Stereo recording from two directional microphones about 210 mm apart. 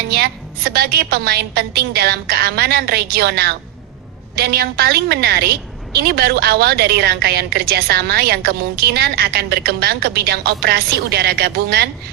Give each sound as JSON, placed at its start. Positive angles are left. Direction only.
{"t": 0.1, "sound": "a woman's voice", "side_deg": -50}